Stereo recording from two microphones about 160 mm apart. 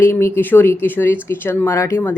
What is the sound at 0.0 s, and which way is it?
Speech, 15° left (ahead or behind).